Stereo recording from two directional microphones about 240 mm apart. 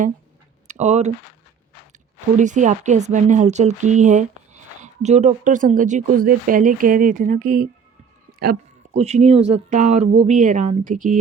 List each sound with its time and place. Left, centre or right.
0.7 s speech: right
2.4 s a woman's voice: right
8.3 s a sound: right
9.0 s a woman's voice: right